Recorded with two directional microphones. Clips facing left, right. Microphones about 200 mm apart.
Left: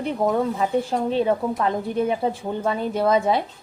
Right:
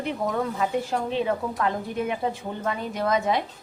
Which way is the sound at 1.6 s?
35° left (ahead or behind).